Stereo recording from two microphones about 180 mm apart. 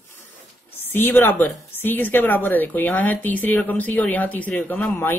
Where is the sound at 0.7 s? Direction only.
10° left (ahead or behind).